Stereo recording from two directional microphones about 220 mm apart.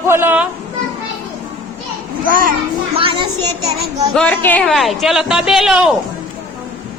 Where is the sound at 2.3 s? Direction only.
40° right (ahead or behind).